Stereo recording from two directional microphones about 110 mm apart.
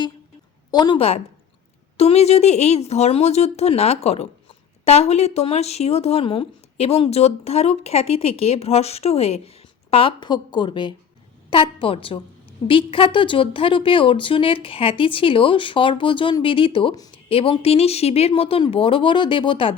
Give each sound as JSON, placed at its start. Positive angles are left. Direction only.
{"t": 0.7, "sound": "a woman's voice", "side_deg": 40}
{"t": 0.9, "sound": "speech", "side_deg": 65}
{"t": 9.9, "sound": "a woman's voice", "side_deg": 55}